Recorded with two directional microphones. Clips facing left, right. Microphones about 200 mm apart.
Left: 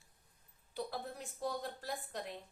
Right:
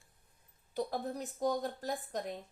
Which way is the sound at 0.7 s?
45° right (ahead or behind).